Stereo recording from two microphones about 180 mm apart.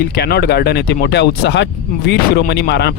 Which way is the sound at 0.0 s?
60° left (ahead or behind).